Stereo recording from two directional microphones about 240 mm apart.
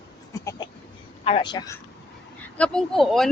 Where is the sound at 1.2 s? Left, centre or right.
Left.